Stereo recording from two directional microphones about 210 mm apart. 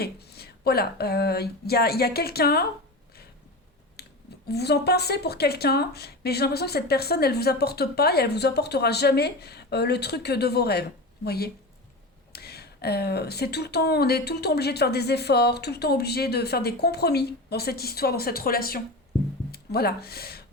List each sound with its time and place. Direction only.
0.0 s speech: 50° left (ahead or behind)
4.0 s a sound: 50° left (ahead or behind)
4.4 s speech: 50° left (ahead or behind)